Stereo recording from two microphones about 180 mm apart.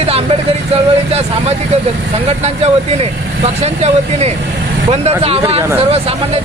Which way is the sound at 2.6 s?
35° right (ahead or behind).